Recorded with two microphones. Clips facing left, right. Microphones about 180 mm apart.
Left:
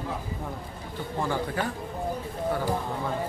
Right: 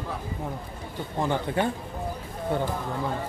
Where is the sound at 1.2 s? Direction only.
20° right (ahead or behind).